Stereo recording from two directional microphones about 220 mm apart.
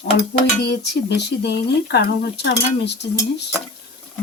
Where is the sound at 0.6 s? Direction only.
50° left (ahead or behind).